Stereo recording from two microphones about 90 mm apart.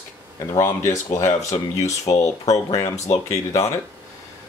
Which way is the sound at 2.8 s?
35° left (ahead or behind).